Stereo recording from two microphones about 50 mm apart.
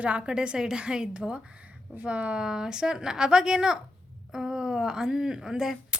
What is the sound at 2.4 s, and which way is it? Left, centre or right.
Speech, centre.